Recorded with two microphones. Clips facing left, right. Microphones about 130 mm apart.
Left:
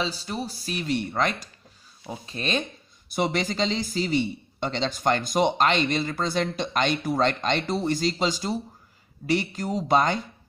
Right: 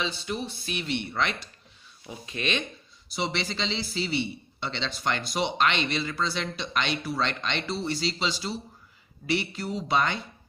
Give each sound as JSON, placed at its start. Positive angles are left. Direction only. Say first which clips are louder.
{"t": 0.0, "sound": "speech", "louder": "left 2 dB", "side_deg": 40}
{"t": 3.1, "sound": "a man's voice", "louder": "left 5 dB", "side_deg": 50}